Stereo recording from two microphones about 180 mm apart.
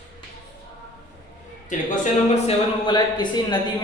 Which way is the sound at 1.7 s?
45° left (ahead or behind).